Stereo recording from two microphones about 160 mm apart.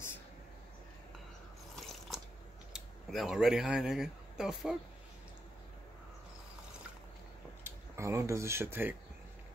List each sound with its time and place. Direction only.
1.9 s a sound: centre (ahead or behind)
2.7 s speech: centre (ahead or behind)
7.6 s speech: 15° right (ahead or behind)